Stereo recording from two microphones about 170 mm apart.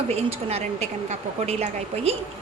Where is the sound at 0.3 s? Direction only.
35° right (ahead or behind).